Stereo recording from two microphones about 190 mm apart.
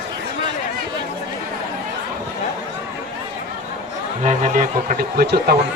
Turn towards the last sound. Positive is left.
turn(degrees=-55)  # may be behind; listen again after turning